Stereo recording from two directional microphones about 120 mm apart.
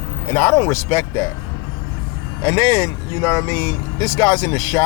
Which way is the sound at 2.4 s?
25° left (ahead or behind).